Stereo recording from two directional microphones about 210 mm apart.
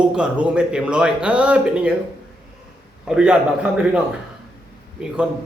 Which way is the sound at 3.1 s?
5° right (ahead or behind).